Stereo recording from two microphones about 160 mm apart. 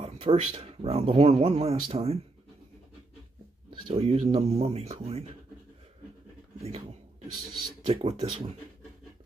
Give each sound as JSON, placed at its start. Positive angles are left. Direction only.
{"t": 0.0, "sound": "speech", "side_deg": -40}
{"t": 3.8, "sound": "speech", "side_deg": -35}
{"t": 7.8, "sound": "speech", "side_deg": -35}